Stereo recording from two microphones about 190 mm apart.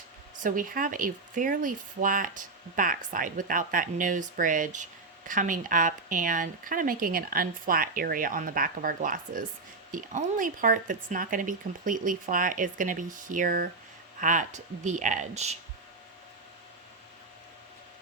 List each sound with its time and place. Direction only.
0.4 s speech: 45° right (ahead or behind)